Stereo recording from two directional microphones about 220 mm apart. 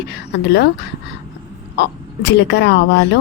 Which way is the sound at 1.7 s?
55° left (ahead or behind).